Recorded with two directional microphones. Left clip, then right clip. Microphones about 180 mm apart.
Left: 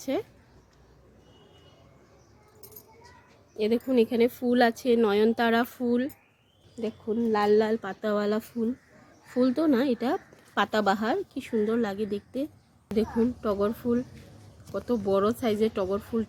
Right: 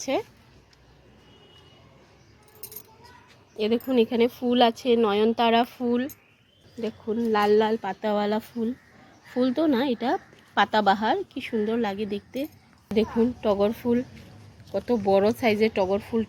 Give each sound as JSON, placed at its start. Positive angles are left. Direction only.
{"t": 0.0, "sound": "speech", "side_deg": 0}
{"t": 3.6, "sound": "a woman's voice", "side_deg": 15}
{"t": 7.3, "sound": "speech", "side_deg": 5}
{"t": 12.9, "sound": "speech", "side_deg": 0}
{"t": 14.9, "sound": "speech", "side_deg": 0}